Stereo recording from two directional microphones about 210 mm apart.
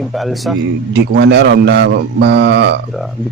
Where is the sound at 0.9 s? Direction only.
55° right (ahead or behind).